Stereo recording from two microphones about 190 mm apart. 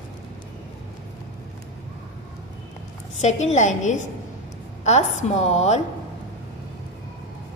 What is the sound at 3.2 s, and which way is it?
A woman's voice, 35° left (ahead or behind).